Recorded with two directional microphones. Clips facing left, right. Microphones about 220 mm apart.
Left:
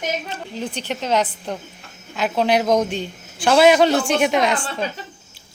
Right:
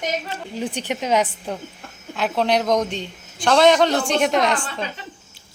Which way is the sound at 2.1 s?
Centre (ahead or behind).